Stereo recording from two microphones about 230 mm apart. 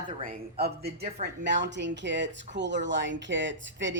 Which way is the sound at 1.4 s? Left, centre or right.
Right.